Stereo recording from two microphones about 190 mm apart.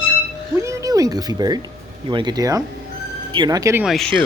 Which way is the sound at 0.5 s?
15° right (ahead or behind).